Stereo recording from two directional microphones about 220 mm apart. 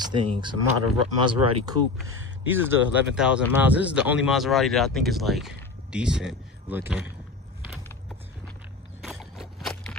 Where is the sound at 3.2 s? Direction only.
5° right (ahead or behind).